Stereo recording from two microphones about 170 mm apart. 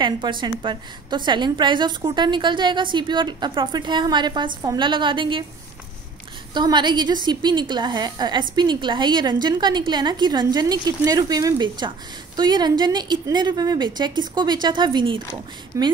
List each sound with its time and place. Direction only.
0.0 s a woman's voice: 25° right (ahead or behind)
6.5 s a woman's voice: 25° right (ahead or behind)